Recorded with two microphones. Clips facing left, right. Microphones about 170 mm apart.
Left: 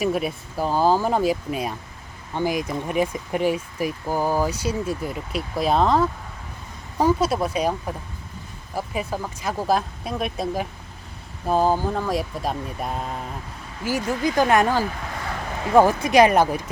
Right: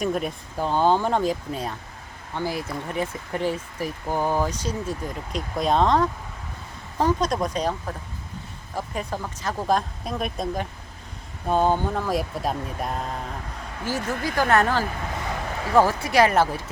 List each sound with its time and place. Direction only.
0.0 s speech: 5° left (ahead or behind)